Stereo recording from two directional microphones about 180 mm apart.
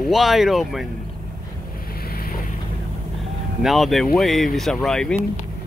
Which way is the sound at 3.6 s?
Centre (ahead or behind).